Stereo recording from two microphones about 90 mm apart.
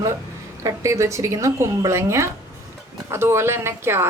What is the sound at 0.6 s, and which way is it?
Speech, 35° right (ahead or behind).